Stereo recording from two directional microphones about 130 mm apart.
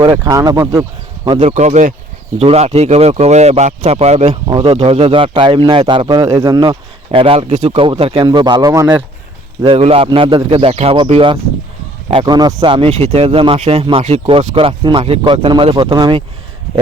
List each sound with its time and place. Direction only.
0.0 s speech: 35° right (ahead or behind)
0.3 s speech: 25° right (ahead or behind)
1.2 s speech: 40° right (ahead or behind)
1.5 s speech: 65° right (ahead or behind)
3.8 s speech: 55° right (ahead or behind)
4.4 s a man's voice: 45° right (ahead or behind)
6.4 s speech: 30° right (ahead or behind)
7.5 s speech: 70° right (ahead or behind)
7.8 s speech: 45° right (ahead or behind); by 9.0 s 25° right (ahead or behind)
9.6 s a man's voice: 45° right (ahead or behind)
12.2 s speech: 30° right (ahead or behind)
12.6 s a man's voice: 45° right (ahead or behind)